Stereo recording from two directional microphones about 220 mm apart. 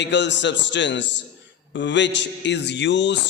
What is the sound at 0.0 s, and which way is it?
A man's voice, 50° left (ahead or behind).